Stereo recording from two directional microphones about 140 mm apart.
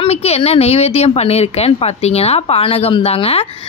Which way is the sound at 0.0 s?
50° left (ahead or behind).